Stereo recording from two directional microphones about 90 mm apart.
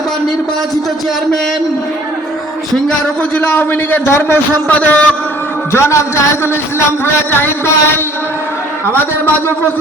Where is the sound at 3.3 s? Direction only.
20° left (ahead or behind).